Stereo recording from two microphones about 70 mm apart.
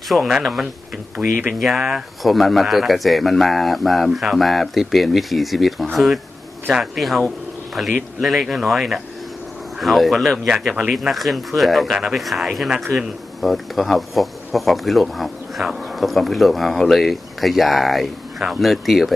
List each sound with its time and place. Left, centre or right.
0.1 s speech: centre